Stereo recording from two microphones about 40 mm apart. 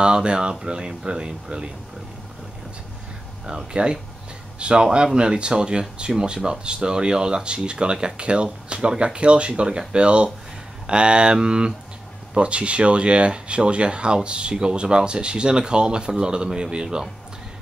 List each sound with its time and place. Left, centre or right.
0.0 s speech: right
3.4 s speech: right